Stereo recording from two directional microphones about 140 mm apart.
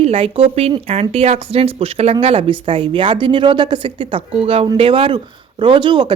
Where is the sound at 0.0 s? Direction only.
45° right (ahead or behind).